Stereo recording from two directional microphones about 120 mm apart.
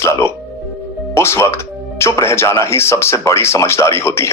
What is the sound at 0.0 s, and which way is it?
A man's voice, 20° left (ahead or behind).